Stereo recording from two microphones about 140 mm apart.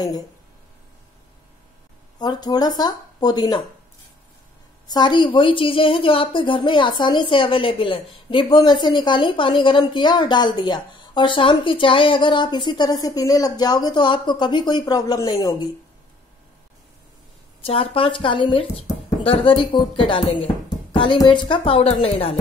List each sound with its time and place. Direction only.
2.1 s speech: 30° left (ahead or behind)
4.8 s a woman's voice: 30° left (ahead or behind)
17.6 s a woman's voice: 40° left (ahead or behind)